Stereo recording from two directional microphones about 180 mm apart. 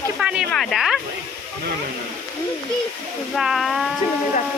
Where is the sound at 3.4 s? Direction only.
Centre (ahead or behind).